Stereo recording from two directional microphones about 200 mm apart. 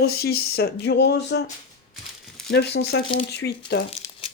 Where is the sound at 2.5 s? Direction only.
55° left (ahead or behind).